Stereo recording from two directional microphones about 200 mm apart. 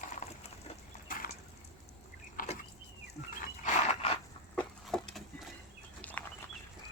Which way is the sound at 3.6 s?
35° left (ahead or behind).